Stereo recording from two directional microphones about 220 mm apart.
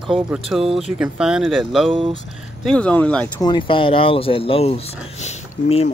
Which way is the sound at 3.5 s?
20° left (ahead or behind).